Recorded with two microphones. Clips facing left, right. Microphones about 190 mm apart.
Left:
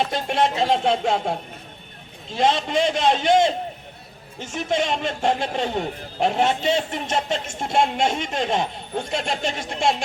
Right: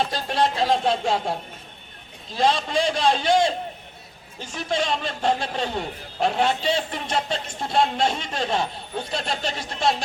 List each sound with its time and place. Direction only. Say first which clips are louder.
0.1 s a man's voice: left 2 dB; 25° left (ahead or behind)